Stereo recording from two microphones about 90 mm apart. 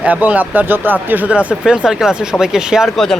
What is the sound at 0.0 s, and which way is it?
Speech, 15° right (ahead or behind).